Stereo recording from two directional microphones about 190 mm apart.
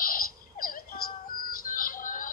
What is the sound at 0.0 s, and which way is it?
Music, 50° left (ahead or behind).